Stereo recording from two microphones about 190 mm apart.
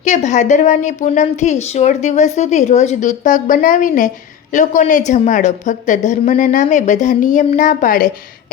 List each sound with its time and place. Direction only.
0.0 s a woman's voice: 40° left (ahead or behind)